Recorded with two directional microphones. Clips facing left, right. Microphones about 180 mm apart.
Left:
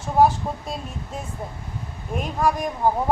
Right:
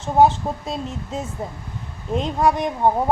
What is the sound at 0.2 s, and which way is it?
A woman's voice, 25° right (ahead or behind).